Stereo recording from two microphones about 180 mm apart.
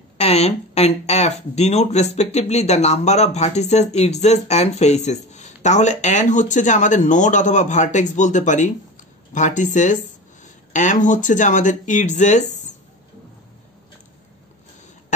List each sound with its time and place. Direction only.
0.2 s speech: 35° left (ahead or behind)